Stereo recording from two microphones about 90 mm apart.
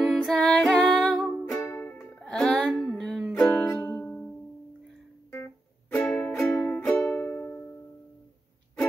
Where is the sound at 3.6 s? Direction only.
30° left (ahead or behind).